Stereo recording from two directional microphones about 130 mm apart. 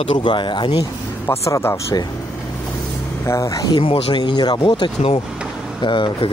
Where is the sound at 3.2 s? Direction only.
25° left (ahead or behind).